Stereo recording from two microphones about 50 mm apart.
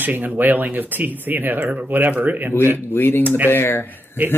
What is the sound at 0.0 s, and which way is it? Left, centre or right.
Speech, right.